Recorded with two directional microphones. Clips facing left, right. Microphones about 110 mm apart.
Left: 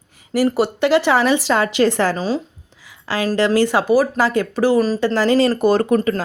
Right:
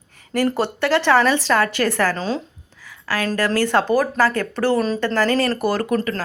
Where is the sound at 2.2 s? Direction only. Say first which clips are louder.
Left 3 dB; 5° left (ahead or behind).